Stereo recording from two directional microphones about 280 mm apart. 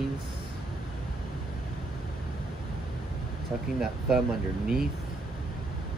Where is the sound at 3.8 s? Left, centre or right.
Centre.